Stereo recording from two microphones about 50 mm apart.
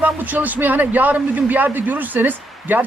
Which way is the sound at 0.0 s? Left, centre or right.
Right.